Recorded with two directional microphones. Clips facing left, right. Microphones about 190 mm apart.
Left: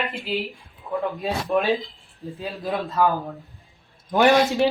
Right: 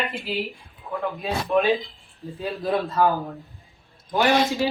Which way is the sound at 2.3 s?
15° left (ahead or behind).